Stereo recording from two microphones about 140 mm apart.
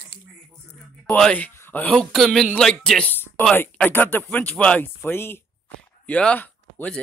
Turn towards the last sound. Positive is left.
turn(degrees=10)  # may be behind; listen again after turning